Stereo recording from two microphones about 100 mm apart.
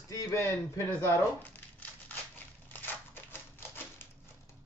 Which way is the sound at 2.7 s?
20° left (ahead or behind).